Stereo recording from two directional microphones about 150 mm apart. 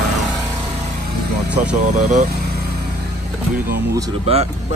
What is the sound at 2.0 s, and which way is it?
Speech, 55° right (ahead or behind).